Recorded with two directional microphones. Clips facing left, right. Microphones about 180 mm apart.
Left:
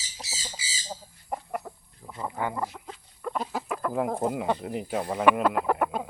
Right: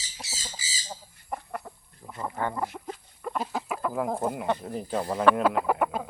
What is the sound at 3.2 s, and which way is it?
Chicken, 5° right (ahead or behind).